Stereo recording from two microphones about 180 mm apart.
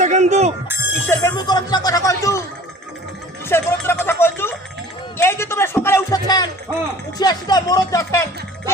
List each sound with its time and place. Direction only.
0.0 s bicycle bell: 40° right (ahead or behind)
1.0 s speech: 15° left (ahead or behind)
3.5 s music: 15° left (ahead or behind)
5.1 s speech: 15° left (ahead or behind)